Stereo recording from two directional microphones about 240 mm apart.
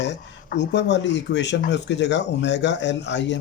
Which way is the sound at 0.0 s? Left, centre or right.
Left.